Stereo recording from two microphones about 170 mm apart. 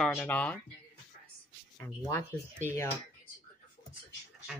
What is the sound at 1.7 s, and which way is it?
Speech, 20° left (ahead or behind).